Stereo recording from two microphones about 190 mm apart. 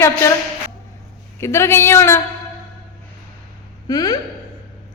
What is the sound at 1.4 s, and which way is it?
Speech, 15° left (ahead or behind).